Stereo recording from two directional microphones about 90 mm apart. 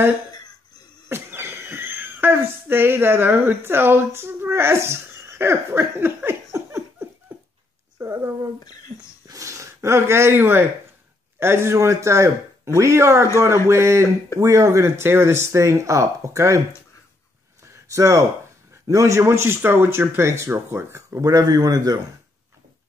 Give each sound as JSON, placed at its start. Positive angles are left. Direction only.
{"t": 1.0, "sound": "speech", "side_deg": -25}
{"t": 5.4, "sound": "laughter", "side_deg": -30}
{"t": 7.3, "sound": "dog", "side_deg": -20}
{"t": 8.0, "sound": "speech", "side_deg": -25}
{"t": 9.3, "sound": "a sound", "side_deg": -35}
{"t": 11.3, "sound": "speech", "side_deg": -30}
{"t": 17.8, "sound": "speech", "side_deg": -35}